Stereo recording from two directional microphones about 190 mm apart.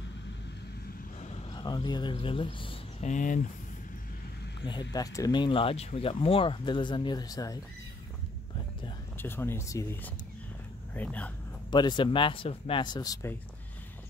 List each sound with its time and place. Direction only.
1.5 s speech: 20° left (ahead or behind); by 3.4 s 40° left (ahead or behind)
4.9 s speech: 20° left (ahead or behind)
9.1 s speech: 10° left (ahead or behind)
11.7 s speech: 25° left (ahead or behind)